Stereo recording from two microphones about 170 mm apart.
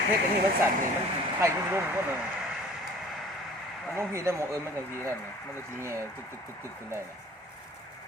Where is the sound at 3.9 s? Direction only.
15° right (ahead or behind).